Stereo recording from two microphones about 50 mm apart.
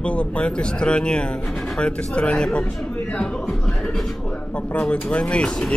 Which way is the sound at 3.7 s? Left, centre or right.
Centre.